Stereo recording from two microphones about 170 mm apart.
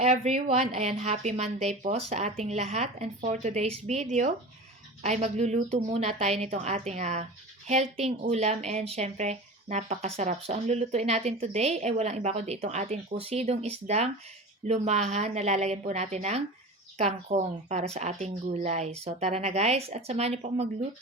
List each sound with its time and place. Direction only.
0.0 s speech: 40° right (ahead or behind)